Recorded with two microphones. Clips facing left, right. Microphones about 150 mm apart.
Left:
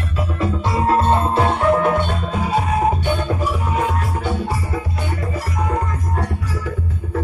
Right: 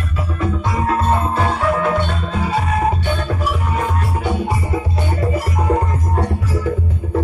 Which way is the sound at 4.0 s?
10° right (ahead or behind).